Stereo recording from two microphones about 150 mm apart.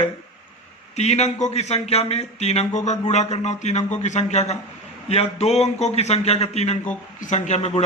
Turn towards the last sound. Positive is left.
turn(degrees=45)  # may be behind; listen again after turning